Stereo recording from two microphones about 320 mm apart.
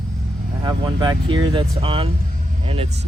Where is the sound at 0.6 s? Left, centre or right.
Centre.